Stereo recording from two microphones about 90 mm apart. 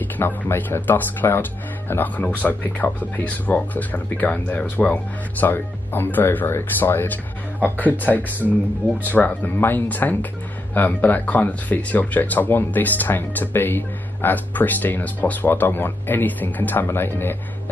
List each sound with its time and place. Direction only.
0.0 s speech: 25° left (ahead or behind)